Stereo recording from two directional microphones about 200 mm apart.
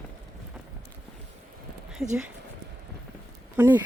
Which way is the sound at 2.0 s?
Centre (ahead or behind).